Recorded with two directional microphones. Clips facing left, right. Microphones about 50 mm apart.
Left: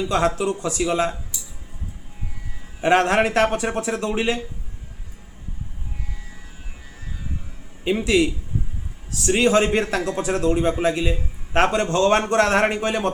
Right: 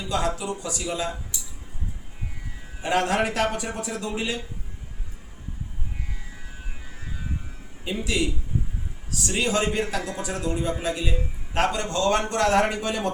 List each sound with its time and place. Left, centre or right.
0.1 s a man's voice: left
2.8 s speech: left
7.9 s a man's voice: left